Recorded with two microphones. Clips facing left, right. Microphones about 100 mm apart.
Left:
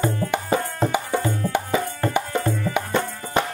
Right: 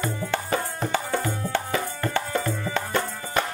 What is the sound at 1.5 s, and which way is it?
Tabla, 15° left (ahead or behind).